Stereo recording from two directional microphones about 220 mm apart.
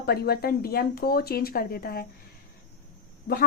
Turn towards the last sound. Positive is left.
turn(degrees=45)  # may be behind; listen again after turning